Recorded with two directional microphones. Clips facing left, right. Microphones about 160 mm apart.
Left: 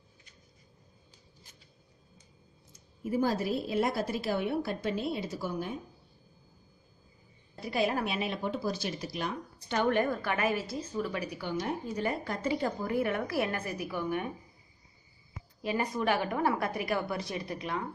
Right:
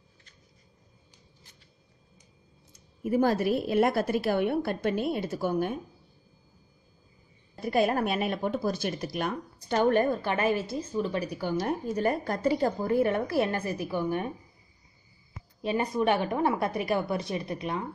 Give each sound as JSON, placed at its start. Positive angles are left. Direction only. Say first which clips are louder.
{"t": 3.0, "sound": "a woman's voice", "louder": "right 5 dB", "side_deg": -60}
{"t": 7.6, "sound": "speech", "louder": "right 5 dB", "side_deg": -50}
{"t": 9.8, "sound": "a woman's voice", "louder": "right 4 dB", "side_deg": -35}
{"t": 11.4, "sound": "a woman's voice", "louder": "right 5 dB", "side_deg": -45}
{"t": 15.6, "sound": "a woman's voice", "louder": "right 4 dB", "side_deg": -25}